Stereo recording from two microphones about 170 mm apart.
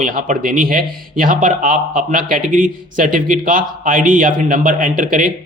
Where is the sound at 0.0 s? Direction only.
50° right (ahead or behind).